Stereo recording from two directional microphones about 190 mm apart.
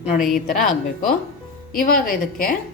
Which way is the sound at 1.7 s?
50° left (ahead or behind).